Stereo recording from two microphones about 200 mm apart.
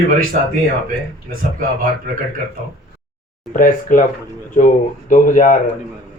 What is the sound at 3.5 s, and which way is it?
Speech, 40° left (ahead or behind).